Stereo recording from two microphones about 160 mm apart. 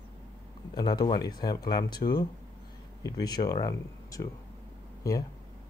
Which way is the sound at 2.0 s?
40° left (ahead or behind).